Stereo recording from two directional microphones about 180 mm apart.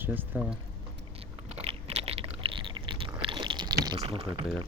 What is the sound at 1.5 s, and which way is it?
Chewing, 35° right (ahead or behind).